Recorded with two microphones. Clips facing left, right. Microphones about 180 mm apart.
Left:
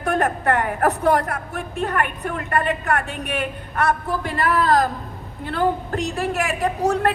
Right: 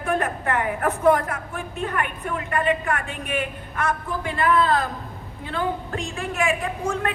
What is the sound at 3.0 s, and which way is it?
Speech, 70° left (ahead or behind).